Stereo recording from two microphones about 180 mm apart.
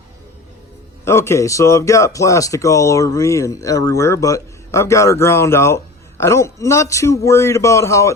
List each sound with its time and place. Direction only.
1.0 s speech: 15° left (ahead or behind)